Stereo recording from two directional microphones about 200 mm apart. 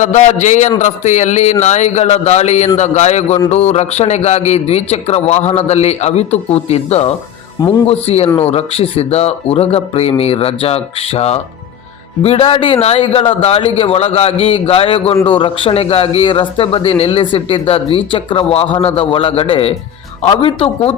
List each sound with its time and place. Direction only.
0.0 s a man's voice: 35° left (ahead or behind)